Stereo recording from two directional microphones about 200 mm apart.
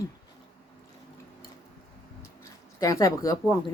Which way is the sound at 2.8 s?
15° left (ahead or behind).